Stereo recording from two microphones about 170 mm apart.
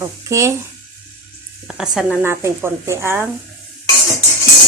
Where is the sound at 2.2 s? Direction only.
15° right (ahead or behind).